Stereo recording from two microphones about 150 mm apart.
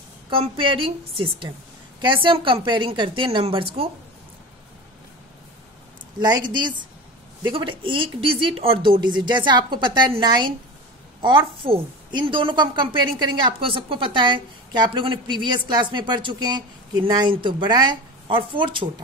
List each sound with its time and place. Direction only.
0.3 s a woman's voice: 35° right (ahead or behind)
6.1 s a woman's voice: 30° right (ahead or behind)